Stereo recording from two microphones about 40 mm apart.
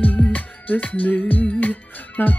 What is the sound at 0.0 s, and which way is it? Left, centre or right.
Music, left.